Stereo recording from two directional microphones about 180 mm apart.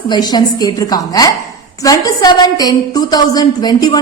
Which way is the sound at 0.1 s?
25° left (ahead or behind).